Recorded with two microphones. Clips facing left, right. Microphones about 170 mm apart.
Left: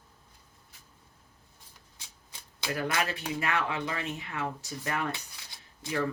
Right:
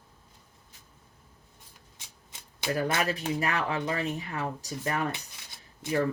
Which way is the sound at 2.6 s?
30° right (ahead or behind).